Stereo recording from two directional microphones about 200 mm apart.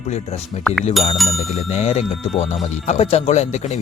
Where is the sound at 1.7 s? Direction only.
35° left (ahead or behind).